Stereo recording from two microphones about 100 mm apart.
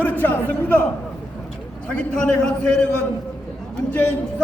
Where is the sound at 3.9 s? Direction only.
10° left (ahead or behind).